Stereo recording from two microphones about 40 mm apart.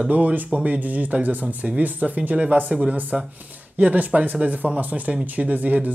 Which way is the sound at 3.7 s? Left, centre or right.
Right.